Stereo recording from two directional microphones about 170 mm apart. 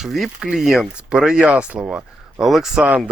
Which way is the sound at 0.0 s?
Centre (ahead or behind).